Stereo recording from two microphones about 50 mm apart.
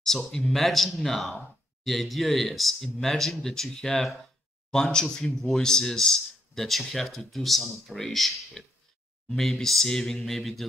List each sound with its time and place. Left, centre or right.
0.0 s speech: centre